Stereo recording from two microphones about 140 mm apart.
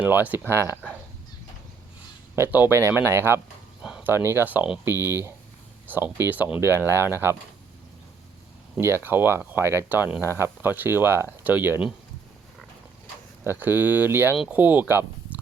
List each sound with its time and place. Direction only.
0.0 s speech: 10° right (ahead or behind)
2.3 s speech: 15° right (ahead or behind)
3.8 s a sound: 5° right (ahead or behind)
4.1 s speech: 15° right (ahead or behind)
8.8 s speech: 15° right (ahead or behind)
13.4 s speech: 15° right (ahead or behind)
14.3 s speech: centre (ahead or behind)
14.6 s speech: 15° right (ahead or behind)